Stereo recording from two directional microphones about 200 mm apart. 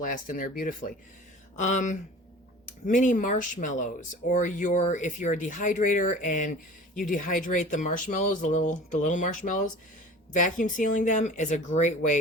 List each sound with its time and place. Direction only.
0.0 s speech: 40° left (ahead or behind)